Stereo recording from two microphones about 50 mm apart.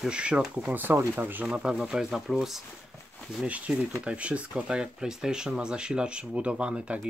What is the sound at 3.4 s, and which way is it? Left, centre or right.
Speech, right.